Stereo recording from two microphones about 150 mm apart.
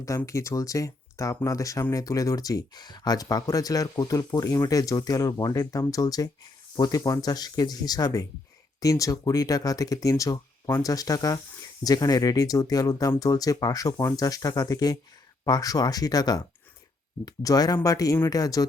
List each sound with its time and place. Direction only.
0.0 s speech: 20° left (ahead or behind)